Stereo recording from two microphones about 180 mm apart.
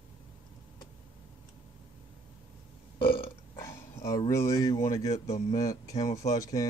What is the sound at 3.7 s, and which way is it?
Speech, 15° left (ahead or behind).